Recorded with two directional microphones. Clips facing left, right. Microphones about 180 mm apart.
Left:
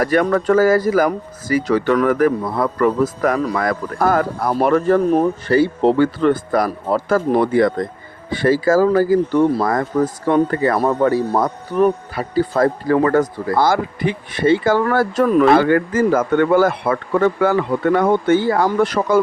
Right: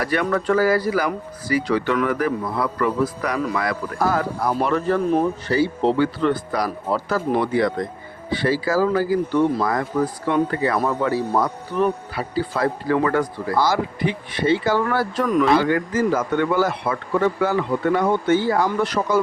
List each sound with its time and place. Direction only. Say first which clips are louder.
0.0 s speech: left 5 dB; 45° left (ahead or behind)
10.8 s speech: left 7 dB; 35° left (ahead or behind)
11.1 s speech: left 3 dB; 50° left (ahead or behind)